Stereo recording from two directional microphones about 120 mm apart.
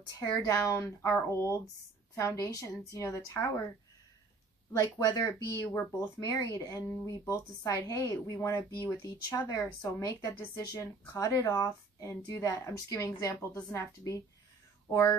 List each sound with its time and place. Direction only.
0.2 s speech: 30° left (ahead or behind)
4.7 s speech: 30° left (ahead or behind)